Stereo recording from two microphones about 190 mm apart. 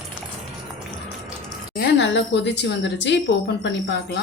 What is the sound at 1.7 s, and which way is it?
Speech, 60° left (ahead or behind).